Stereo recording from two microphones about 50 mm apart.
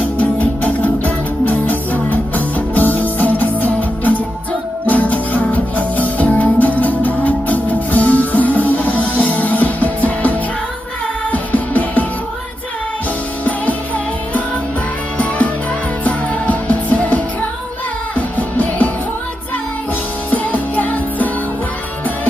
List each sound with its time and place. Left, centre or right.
0.2 s music: left
16.0 s music: left
20.3 s music: left